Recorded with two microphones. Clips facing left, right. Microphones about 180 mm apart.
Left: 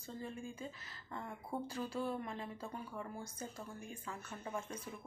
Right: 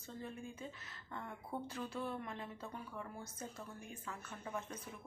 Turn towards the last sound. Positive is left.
turn(degrees=10)  # may be behind; listen again after turning